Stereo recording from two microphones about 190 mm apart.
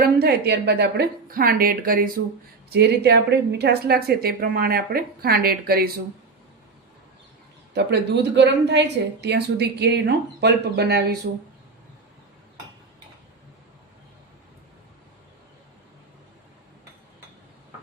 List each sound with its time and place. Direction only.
0.0 s a woman's voice: 55° right (ahead or behind)
7.7 s speech: 60° right (ahead or behind)